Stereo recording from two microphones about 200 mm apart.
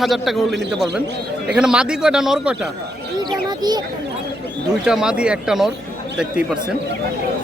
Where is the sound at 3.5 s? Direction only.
20° right (ahead or behind).